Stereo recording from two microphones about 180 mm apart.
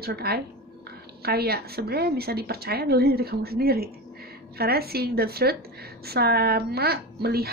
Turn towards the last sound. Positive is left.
turn(degrees=-60)  # may be behind; listen again after turning